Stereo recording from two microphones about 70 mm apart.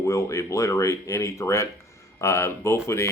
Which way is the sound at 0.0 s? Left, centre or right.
Left.